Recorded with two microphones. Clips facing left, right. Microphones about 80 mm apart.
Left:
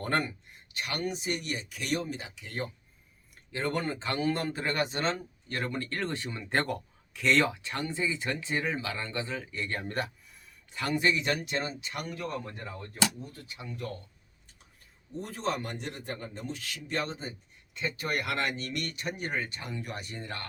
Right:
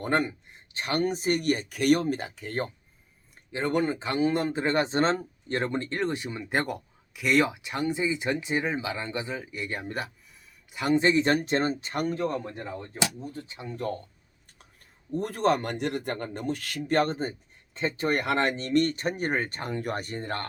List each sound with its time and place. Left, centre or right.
0.0 s speech: centre; by 2.6 s right
3.5 s speech: centre
10.8 s speech: right
14.6 s speech: right
17.7 s speech: right